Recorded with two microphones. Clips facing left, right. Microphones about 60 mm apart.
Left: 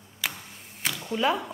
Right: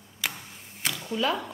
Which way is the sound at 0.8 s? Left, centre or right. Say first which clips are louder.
Left 1 dB; centre.